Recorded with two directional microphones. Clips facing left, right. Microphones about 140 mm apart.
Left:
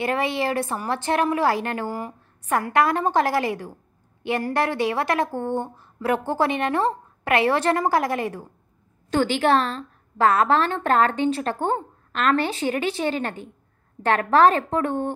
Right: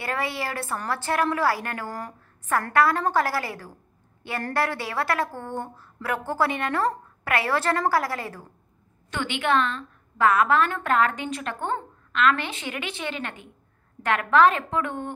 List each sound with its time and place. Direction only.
0.0 s a woman's voice: 20° left (ahead or behind)
1.9 s a sound: 5° left (ahead or behind)
2.7 s a woman's voice: 20° left (ahead or behind)
9.1 s a woman's voice: 35° left (ahead or behind)